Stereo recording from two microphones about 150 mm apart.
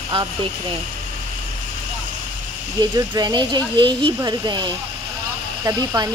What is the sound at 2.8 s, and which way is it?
Speech, 25° right (ahead or behind).